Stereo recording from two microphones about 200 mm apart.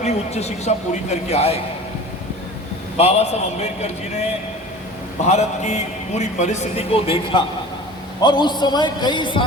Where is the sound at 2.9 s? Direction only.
30° left (ahead or behind).